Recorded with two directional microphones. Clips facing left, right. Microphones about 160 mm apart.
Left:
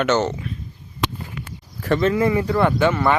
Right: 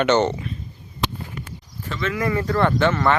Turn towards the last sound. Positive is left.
turn(degrees=10)  # may be behind; listen again after turning